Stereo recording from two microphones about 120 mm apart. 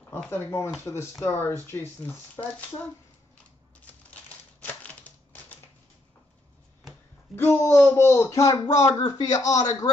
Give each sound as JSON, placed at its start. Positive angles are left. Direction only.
{"t": 0.3, "sound": "speech", "side_deg": 20}
{"t": 3.8, "sound": "typewriter", "side_deg": 15}
{"t": 7.3, "sound": "speech", "side_deg": 20}